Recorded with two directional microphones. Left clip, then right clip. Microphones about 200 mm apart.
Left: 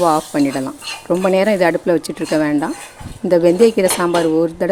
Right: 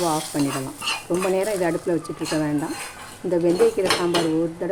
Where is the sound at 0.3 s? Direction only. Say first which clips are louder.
Left 7 dB; 60° left (ahead or behind).